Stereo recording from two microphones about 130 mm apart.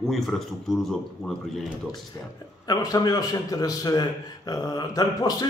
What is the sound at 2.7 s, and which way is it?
A man's voice, 30° left (ahead or behind).